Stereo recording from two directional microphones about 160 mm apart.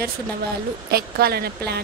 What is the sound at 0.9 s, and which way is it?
Speech, 80° right.